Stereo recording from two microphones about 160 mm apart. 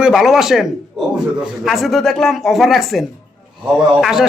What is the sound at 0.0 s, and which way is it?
A man's voice, centre (ahead or behind).